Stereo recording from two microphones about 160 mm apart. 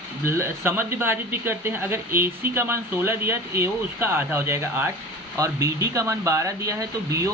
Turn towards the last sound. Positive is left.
turn(degrees=-20)  # may be behind; listen again after turning